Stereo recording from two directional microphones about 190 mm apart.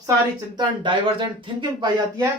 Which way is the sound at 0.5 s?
25° right (ahead or behind).